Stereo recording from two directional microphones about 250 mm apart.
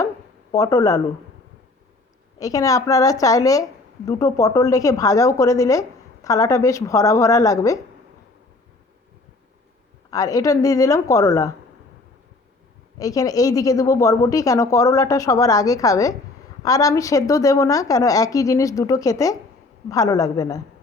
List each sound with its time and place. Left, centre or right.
0.5 s a woman's voice: centre
2.4 s a woman's voice: centre
10.1 s a woman's voice: centre
13.0 s a woman's voice: centre